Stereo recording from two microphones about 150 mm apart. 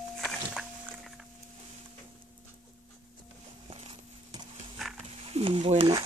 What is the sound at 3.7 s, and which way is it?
Horse, 35° right (ahead or behind).